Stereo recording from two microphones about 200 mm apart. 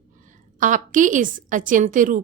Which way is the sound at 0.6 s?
40° right (ahead or behind).